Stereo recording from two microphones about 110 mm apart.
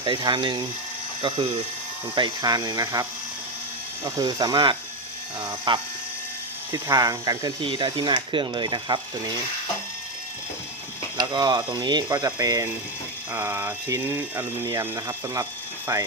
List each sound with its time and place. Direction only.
0.0 s ratchet: 45° right (ahead or behind)
2.1 s sizzle: 40° right (ahead or behind)
4.2 s sizzle: 35° right (ahead or behind)
5.4 s ratchet: 45° right (ahead or behind)
6.7 s sizzle: 35° right (ahead or behind)
7.6 s ratchet: 50° right (ahead or behind)
11.2 s sizzle: 40° right (ahead or behind)
13.3 s speech: 20° right (ahead or behind)
14.7 s sizzle: 35° right (ahead or behind)